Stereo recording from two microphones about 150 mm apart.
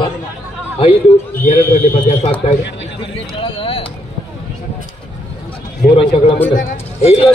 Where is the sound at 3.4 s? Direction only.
35° left (ahead or behind).